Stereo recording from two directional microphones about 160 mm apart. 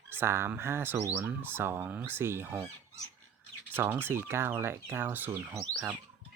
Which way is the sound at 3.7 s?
15° right (ahead or behind).